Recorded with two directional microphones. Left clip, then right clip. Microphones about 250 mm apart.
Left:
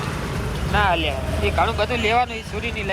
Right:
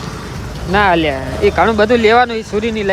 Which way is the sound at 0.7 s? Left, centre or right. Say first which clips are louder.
Right 8 dB; right.